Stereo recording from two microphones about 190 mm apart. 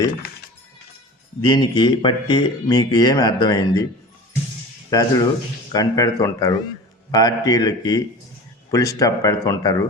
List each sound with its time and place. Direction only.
1.5 s speech: 20° left (ahead or behind)
4.9 s speech: 20° left (ahead or behind)